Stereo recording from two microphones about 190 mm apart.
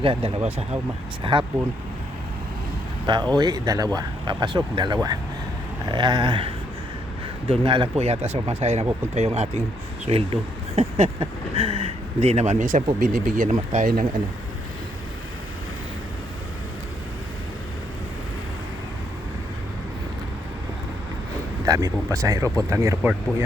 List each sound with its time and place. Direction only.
0.0 s speech: 30° right (ahead or behind)
3.1 s speech: 20° right (ahead or behind); by 14.1 s 45° right (ahead or behind)
21.7 s speech: 20° right (ahead or behind)